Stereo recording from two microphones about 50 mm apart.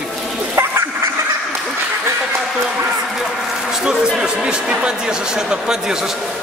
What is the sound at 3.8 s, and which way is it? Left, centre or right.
A man's voice, centre.